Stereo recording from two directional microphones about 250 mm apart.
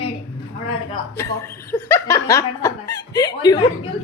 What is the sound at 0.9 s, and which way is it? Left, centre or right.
Speech, centre.